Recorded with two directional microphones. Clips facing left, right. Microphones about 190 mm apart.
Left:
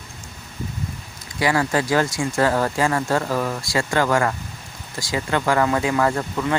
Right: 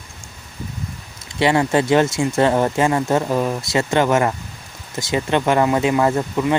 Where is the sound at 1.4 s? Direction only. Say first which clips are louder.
Right 4 dB; 25° right (ahead or behind).